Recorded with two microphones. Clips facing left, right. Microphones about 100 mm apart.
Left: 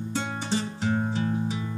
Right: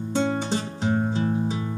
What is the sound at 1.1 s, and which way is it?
Music, 25° right (ahead or behind).